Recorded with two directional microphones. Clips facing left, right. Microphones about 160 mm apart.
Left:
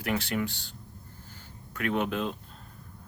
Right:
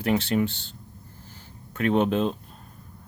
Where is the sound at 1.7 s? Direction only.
25° right (ahead or behind).